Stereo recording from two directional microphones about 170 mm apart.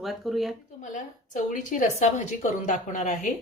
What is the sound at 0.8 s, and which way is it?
A woman's voice, 50° left (ahead or behind).